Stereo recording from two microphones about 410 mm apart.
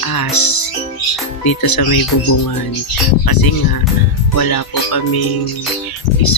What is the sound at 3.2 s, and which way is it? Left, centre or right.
Speech, left.